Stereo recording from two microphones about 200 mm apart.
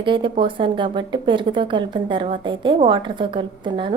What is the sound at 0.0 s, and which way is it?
Speech, 25° right (ahead or behind).